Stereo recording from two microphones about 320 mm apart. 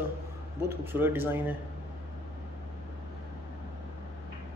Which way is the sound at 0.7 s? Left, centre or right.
Centre.